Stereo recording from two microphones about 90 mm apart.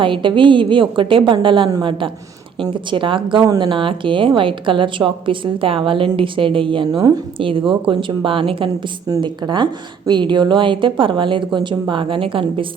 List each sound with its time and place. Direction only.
0.0 s a woman's voice: 65° right (ahead or behind)
9.2 s a woman's voice: 60° right (ahead or behind); by 12.6 s 75° right (ahead or behind)